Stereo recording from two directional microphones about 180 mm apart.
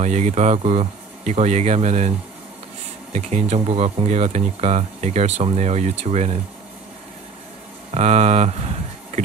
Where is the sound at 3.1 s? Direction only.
40° right (ahead or behind).